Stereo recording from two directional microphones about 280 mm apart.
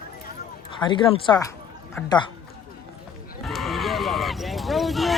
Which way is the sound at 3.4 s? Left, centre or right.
Centre.